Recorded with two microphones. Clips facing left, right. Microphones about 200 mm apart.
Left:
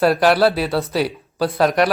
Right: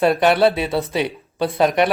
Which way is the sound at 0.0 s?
Centre (ahead or behind).